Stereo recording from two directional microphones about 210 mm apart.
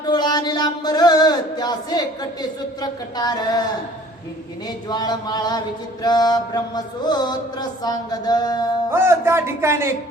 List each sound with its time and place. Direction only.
0.0 s a sound: 20° left (ahead or behind)
2.8 s mantra: 20° left (ahead or behind)
4.9 s mantra: 20° left (ahead or behind)
8.9 s speech: 10° right (ahead or behind)